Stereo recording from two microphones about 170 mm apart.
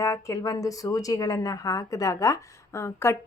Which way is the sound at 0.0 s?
20° left (ahead or behind).